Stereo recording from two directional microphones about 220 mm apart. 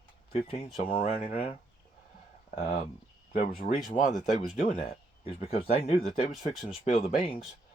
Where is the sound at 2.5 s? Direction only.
35° left (ahead or behind).